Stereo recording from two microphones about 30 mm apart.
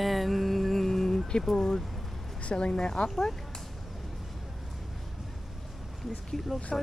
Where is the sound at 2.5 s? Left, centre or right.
Left.